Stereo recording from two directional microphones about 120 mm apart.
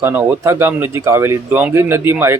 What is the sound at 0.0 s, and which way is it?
Speech, 15° right (ahead or behind).